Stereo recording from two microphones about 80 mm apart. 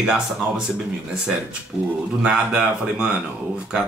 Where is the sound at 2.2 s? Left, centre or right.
Centre.